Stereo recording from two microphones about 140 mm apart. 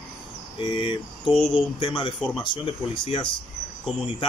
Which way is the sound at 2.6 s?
40° left (ahead or behind).